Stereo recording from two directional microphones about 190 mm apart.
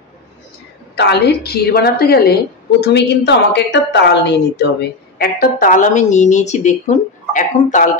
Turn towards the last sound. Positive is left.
turn(degrees=40)  # may be behind; listen again after turning